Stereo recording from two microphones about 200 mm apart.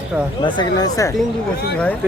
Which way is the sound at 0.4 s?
25° left (ahead or behind).